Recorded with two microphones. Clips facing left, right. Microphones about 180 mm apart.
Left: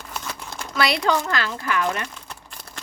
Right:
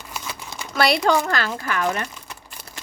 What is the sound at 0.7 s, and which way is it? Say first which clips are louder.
A child's voice: right 3 dB; 50° right (ahead or behind).